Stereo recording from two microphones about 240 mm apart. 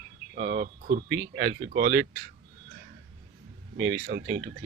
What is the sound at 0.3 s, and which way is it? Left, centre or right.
Speech, right.